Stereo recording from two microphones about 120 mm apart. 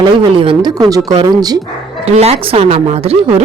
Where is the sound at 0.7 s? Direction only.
30° right (ahead or behind).